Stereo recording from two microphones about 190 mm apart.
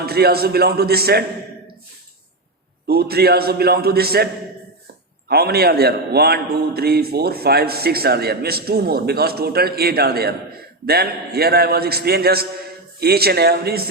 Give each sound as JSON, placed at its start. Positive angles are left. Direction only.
{"t": 0.0, "sound": "a man's voice", "side_deg": -55}
{"t": 2.8, "sound": "a man's voice", "side_deg": -55}
{"t": 5.3, "sound": "a man's voice", "side_deg": -55}